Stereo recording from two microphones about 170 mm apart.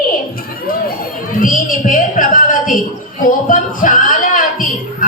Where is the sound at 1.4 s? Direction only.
50° left (ahead or behind).